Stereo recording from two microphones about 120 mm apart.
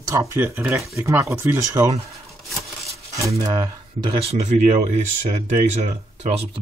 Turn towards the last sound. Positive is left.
turn(degrees=-60)  # may be behind; listen again after turning